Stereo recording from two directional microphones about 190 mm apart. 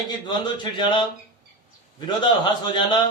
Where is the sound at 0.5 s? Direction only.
25° left (ahead or behind).